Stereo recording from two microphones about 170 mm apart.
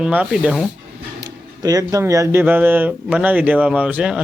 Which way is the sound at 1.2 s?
20° right (ahead or behind).